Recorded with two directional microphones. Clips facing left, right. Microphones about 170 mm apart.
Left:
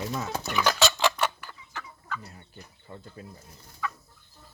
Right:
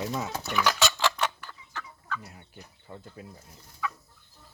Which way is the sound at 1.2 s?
10° left (ahead or behind).